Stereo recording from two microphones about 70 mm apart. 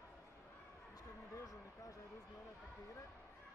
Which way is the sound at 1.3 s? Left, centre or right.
Left.